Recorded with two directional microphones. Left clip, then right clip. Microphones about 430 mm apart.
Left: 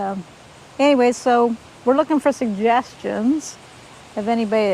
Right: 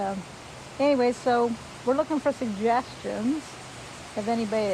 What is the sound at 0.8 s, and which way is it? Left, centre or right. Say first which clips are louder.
Speech: left 7 dB; left.